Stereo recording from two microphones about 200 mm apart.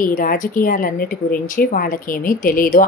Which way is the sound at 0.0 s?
45° left (ahead or behind).